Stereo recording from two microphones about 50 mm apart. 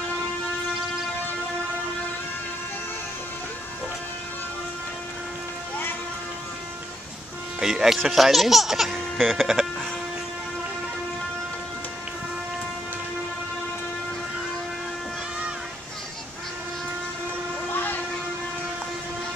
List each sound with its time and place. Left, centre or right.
7.6 s speech: centre
17.7 s vehicle: left